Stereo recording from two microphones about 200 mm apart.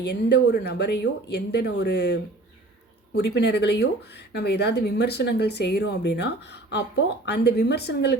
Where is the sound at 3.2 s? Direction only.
60° left (ahead or behind).